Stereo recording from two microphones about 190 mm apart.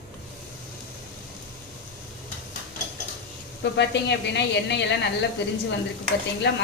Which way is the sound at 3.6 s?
65° left (ahead or behind).